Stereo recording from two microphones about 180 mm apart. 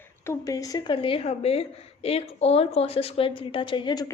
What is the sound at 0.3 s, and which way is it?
A woman's voice, 20° left (ahead or behind).